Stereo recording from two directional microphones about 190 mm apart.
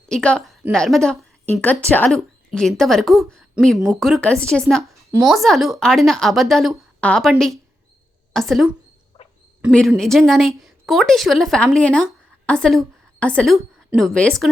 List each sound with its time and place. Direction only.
0.1 s a woman's voice: 5° left (ahead or behind)
4.9 s a sound: 15° right (ahead or behind)
5.3 s a woman's voice: centre (ahead or behind)
9.7 s speech: centre (ahead or behind)